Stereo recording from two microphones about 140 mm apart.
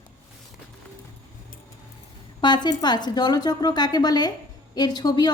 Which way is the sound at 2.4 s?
30° left (ahead or behind).